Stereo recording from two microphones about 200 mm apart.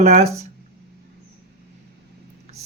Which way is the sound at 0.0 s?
35° right (ahead or behind).